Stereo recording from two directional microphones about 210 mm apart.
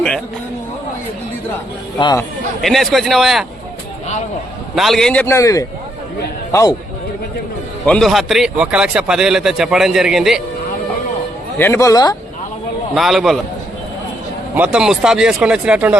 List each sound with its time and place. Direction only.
2.0 s speech: 20° left (ahead or behind)
2.6 s speech: centre (ahead or behind)
4.7 s a man's voice: centre (ahead or behind); by 6.7 s 15° left (ahead or behind)
7.9 s speech: centre (ahead or behind)
11.5 s a man's voice: 10° left (ahead or behind)
12.9 s speech: centre (ahead or behind)
14.5 s speech: 5° right (ahead or behind)